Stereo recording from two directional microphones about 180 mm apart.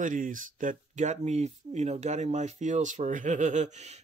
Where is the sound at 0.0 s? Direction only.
45° right (ahead or behind).